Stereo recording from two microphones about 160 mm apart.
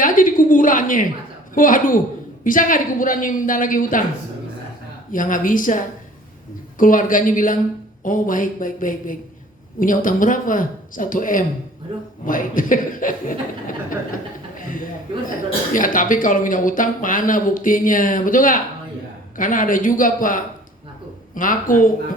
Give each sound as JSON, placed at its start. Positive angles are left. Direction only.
{"t": 0.0, "sound": "a sound", "side_deg": 55}
{"t": 1.5, "sound": "speech", "side_deg": 55}
{"t": 5.1, "sound": "speech", "side_deg": 55}
{"t": 14.5, "sound": "chuckle", "side_deg": 55}
{"t": 15.7, "sound": "speech", "side_deg": 55}